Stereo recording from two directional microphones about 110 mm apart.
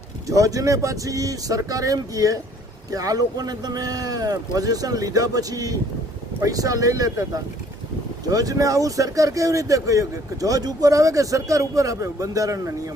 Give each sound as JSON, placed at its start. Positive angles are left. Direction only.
{"t": 0.3, "sound": "speech", "side_deg": -30}
{"t": 8.3, "sound": "speech", "side_deg": -35}